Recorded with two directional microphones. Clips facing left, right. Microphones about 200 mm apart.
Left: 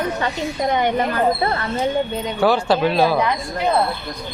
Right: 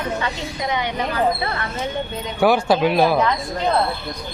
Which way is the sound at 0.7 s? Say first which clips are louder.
Left 4 dB; 50° left (ahead or behind).